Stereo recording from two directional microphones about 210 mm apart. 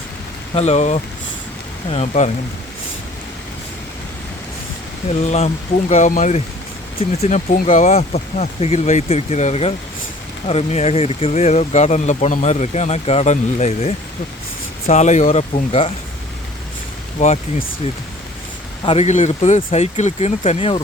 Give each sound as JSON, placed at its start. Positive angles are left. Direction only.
{"t": 0.5, "sound": "speech", "side_deg": 30}
{"t": 5.2, "sound": "speech", "side_deg": 30}
{"t": 17.2, "sound": "speech", "side_deg": 35}
{"t": 18.9, "sound": "speech", "side_deg": 30}